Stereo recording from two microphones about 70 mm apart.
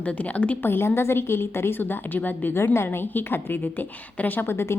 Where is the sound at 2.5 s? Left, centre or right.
Left.